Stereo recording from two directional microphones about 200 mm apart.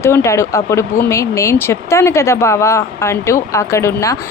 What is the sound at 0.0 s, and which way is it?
Speech, 15° left (ahead or behind).